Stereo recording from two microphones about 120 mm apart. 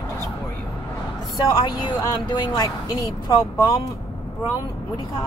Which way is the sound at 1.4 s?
40° left (ahead or behind).